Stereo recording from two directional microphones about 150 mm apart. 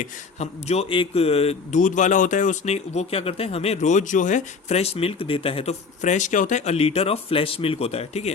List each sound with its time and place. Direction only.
0.0 s speech: 45° left (ahead or behind)